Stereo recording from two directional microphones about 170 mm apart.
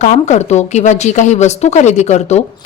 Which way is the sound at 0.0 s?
45° left (ahead or behind).